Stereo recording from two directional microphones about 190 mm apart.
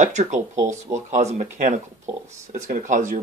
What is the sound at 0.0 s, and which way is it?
Speech, 40° right (ahead or behind).